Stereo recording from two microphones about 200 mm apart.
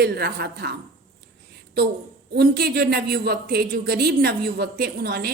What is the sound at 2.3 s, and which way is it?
Speech, 50° right (ahead or behind).